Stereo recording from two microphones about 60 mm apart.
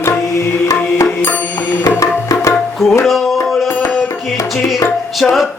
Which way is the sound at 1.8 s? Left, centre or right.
Left.